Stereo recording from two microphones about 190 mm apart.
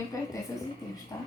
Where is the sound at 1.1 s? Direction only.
20° left (ahead or behind).